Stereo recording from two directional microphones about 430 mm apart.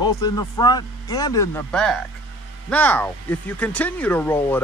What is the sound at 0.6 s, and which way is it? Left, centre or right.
Speech, centre.